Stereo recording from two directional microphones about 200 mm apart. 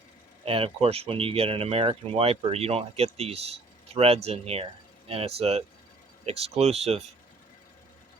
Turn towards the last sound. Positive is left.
turn(degrees=-30)  # may be behind; listen again after turning